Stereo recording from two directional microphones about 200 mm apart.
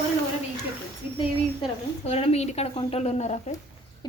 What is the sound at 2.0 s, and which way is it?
A woman's voice, 30° left (ahead or behind).